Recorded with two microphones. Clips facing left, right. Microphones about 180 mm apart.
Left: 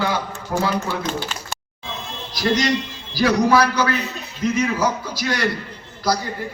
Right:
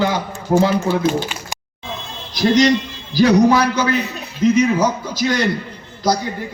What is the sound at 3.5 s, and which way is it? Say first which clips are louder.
A man's voice: right 2 dB; 20° right (ahead or behind).